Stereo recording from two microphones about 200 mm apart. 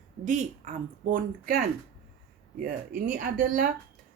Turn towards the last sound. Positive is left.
turn(degrees=-45)  # may be behind; listen again after turning